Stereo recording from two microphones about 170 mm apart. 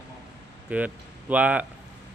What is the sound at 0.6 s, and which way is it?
Speech, 10° right (ahead or behind).